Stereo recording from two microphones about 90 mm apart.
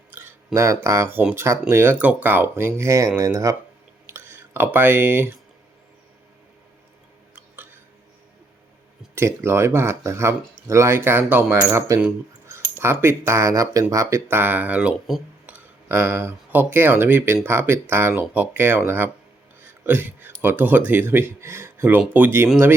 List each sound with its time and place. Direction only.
0.1 s a sound: 20° right (ahead or behind)
0.5 s speech: 30° right (ahead or behind)
4.0 s a sound: 25° right (ahead or behind)
7.3 s hiccup: 20° right (ahead or behind)
9.1 s speech: 30° right (ahead or behind)
14.3 s speech: 20° right (ahead or behind)